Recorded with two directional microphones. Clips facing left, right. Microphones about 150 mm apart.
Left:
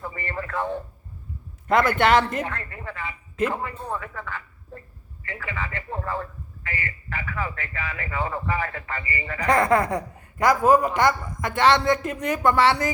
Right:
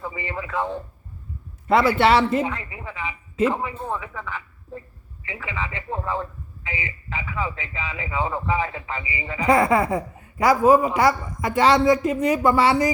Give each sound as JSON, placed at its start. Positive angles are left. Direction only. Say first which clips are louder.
{"t": 0.0, "sound": "radio", "louder": "right 1 dB", "side_deg": -10}
{"t": 1.6, "sound": "a man's voice", "louder": "right 2 dB", "side_deg": -5}